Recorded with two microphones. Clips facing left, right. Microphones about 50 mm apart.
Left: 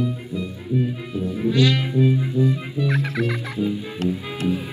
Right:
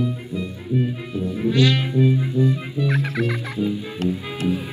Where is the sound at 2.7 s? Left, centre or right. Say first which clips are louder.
Even; right.